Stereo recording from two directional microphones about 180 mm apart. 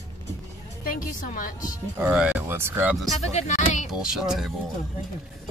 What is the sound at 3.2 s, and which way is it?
Speech, 40° left (ahead or behind).